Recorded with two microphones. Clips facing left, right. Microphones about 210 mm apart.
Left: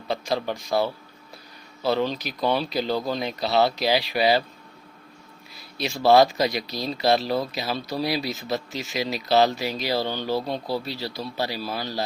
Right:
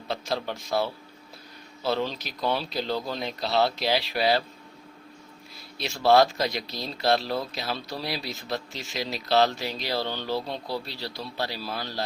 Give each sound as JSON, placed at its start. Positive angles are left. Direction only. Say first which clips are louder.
{"t": 0.1, "sound": "speech", "louder": "left 4 dB", "side_deg": 0}
{"t": 5.5, "sound": "speech", "louder": "left 5 dB", "side_deg": 0}